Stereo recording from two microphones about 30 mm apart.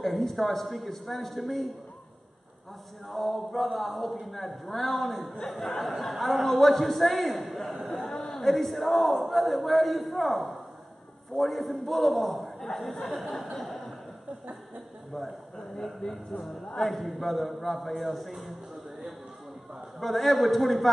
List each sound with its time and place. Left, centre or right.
0.0 s speech: centre
3.1 s speech: centre
8.1 s a sound: left
8.4 s speech: centre
13.0 s a sound: centre
15.2 s speech: centre
15.5 s speech: centre
16.8 s speech: centre
20.0 s speech: centre